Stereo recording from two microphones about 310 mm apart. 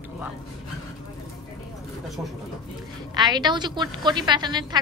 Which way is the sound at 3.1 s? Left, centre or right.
Centre.